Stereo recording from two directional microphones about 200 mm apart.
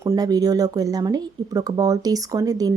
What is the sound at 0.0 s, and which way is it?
A woman's voice, 15° right (ahead or behind).